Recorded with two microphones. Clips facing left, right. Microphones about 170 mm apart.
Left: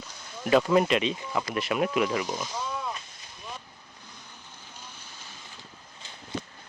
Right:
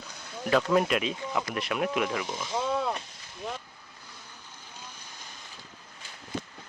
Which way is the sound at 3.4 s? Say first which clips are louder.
Right 5 dB; 70° right (ahead or behind).